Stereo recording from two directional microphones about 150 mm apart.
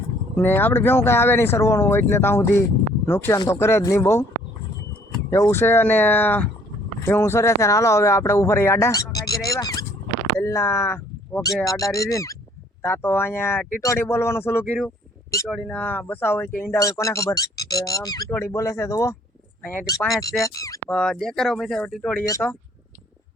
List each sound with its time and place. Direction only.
0.3 s speech: 15° left (ahead or behind)
5.3 s speech: 15° left (ahead or behind)
20.0 s speech: centre (ahead or behind)
20.4 s speech: 20° left (ahead or behind)
20.9 s speech: 5° left (ahead or behind)
22.1 s speech: 15° left (ahead or behind)